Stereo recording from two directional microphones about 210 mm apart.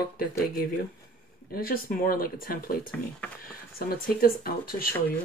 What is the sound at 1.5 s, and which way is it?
Speech, 45° left (ahead or behind).